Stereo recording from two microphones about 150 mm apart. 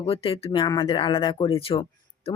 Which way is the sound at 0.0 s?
40° left (ahead or behind).